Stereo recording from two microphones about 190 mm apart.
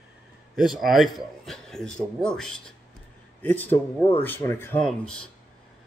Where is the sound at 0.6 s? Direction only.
Centre (ahead or behind).